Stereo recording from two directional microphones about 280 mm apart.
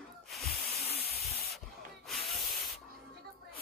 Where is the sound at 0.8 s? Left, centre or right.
Left.